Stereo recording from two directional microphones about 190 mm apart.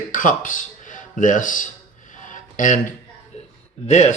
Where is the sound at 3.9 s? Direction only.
35° left (ahead or behind).